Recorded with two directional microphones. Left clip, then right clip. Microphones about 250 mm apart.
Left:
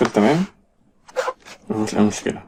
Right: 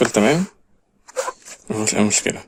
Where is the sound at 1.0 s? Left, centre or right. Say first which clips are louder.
Left 2 dB; centre.